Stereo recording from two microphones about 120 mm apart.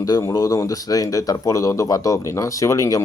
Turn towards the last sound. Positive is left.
turn(degrees=25)  # may be behind; listen again after turning